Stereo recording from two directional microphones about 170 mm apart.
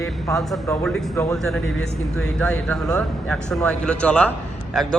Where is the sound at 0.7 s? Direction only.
10° left (ahead or behind).